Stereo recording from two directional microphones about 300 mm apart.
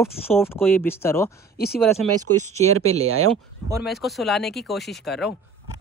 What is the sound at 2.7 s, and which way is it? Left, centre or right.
Speech, right.